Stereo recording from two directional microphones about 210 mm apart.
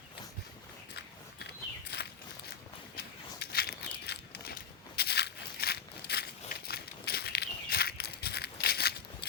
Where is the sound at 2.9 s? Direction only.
50° left (ahead or behind).